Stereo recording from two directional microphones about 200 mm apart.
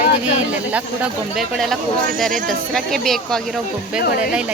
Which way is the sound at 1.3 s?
Centre (ahead or behind).